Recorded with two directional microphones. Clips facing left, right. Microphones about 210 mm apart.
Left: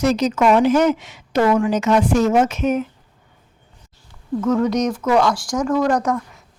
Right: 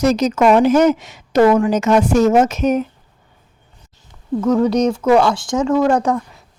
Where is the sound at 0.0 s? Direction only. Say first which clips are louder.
Right 3 dB; 40° right (ahead or behind).